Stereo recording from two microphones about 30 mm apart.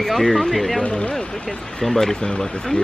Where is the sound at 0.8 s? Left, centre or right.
Left.